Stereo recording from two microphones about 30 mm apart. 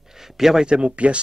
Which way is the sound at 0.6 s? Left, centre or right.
Right.